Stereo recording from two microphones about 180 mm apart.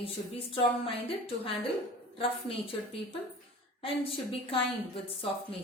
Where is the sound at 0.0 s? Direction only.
30° left (ahead or behind).